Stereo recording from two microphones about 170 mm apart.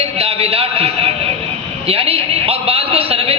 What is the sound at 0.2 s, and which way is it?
Speech, 35° right (ahead or behind).